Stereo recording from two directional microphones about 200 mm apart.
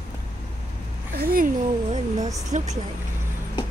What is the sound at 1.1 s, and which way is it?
A woman's voice, 45° right (ahead or behind).